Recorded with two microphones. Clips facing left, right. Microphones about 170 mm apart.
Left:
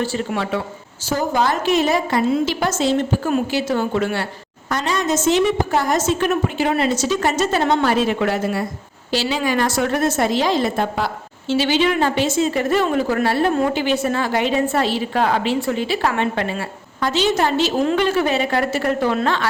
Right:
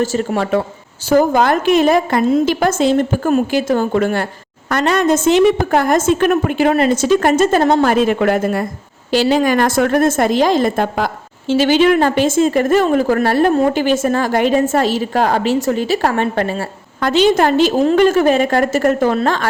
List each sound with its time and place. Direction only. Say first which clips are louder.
0.0 s a woman's voice: right 5 dB; 45° right (ahead or behind)
1.1 s a woman's voice: right 7 dB; 55° right (ahead or behind)
4.7 s a woman's voice: right 6 dB; 65° right (ahead or behind); by 19.5 s 45° right (ahead or behind)